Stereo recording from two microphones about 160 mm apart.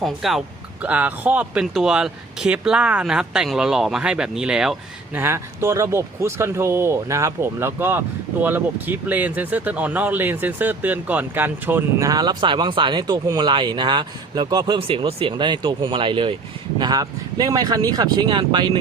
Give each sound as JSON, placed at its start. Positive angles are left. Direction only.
{"t": 0.0, "sound": "speech", "side_deg": 0}
{"t": 5.2, "sound": "speech", "side_deg": -15}